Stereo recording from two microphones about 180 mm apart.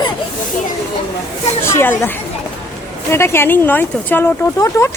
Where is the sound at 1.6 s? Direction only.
15° left (ahead or behind).